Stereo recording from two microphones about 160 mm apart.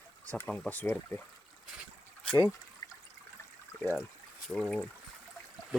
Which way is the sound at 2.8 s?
20° left (ahead or behind).